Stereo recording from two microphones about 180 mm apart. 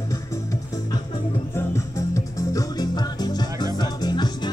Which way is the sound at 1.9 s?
15° left (ahead or behind).